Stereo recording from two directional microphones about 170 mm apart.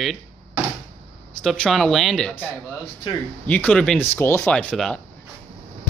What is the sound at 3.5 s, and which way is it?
Speech, 5° left (ahead or behind).